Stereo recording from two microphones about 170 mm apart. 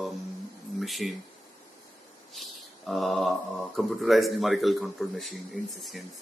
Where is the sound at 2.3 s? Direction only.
Centre (ahead or behind).